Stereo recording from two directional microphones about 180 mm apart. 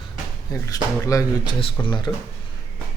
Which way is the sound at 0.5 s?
20° left (ahead or behind).